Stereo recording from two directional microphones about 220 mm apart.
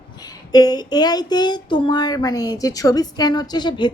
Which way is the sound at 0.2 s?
15° left (ahead or behind).